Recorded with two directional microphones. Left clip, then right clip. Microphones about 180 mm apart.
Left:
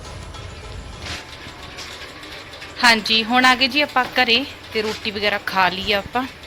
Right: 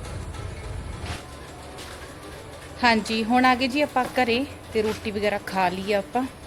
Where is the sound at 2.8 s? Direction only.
10° right (ahead or behind).